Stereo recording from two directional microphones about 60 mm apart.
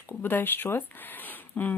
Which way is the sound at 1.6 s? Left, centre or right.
Left.